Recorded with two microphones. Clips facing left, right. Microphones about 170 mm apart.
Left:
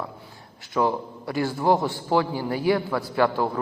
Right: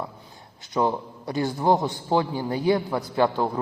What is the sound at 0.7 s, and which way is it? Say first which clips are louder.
A man's voice: even; 20° right (ahead or behind).